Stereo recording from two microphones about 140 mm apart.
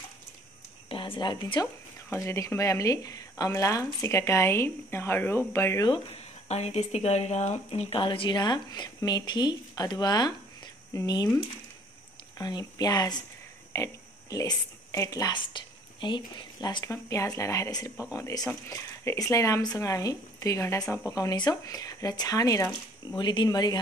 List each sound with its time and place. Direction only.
0.8 s a woman's voice: 40° left (ahead or behind)
2.2 s speech: 20° left (ahead or behind)
6.5 s speech: 50° left (ahead or behind); by 11.2 s 25° left (ahead or behind)
12.4 s a woman's voice: 30° left (ahead or behind)